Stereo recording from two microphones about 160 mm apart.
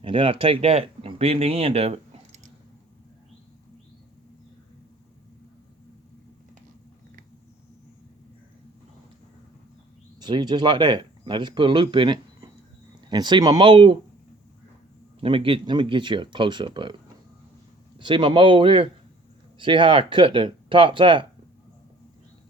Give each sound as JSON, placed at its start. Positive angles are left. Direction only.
{"t": 0.0, "sound": "speech", "side_deg": -35}
{"t": 10.2, "sound": "speech", "side_deg": -25}
{"t": 15.2, "sound": "speech", "side_deg": -35}
{"t": 17.9, "sound": "speech", "side_deg": -30}